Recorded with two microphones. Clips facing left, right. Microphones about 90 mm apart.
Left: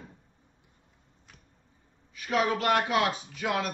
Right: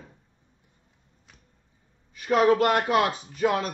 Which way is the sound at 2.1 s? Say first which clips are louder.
Right 7 dB; 40° right (ahead or behind).